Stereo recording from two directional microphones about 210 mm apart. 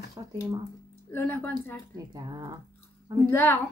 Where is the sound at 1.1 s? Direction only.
10° left (ahead or behind).